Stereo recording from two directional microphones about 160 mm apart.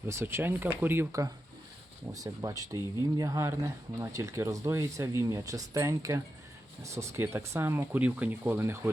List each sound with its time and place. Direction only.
0.1 s speech: 15° right (ahead or behind)